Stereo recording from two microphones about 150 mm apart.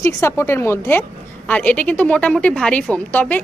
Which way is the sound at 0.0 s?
15° left (ahead or behind).